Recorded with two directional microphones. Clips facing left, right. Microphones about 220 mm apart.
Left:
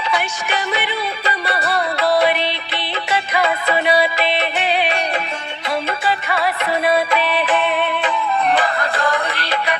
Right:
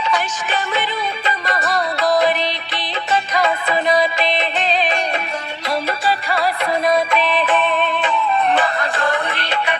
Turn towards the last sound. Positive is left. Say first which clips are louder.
# even
turn(degrees=10)  # may be behind; listen again after turning